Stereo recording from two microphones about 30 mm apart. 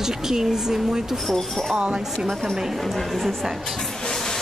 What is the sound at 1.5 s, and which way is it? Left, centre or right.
Speech, centre.